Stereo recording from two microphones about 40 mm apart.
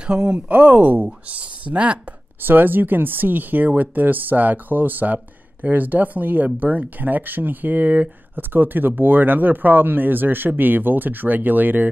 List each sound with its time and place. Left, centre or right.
0.0 s speech: right
0.3 s speech: right
2.4 s speech: right